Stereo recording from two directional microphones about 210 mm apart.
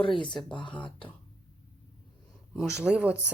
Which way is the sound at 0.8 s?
20° left (ahead or behind).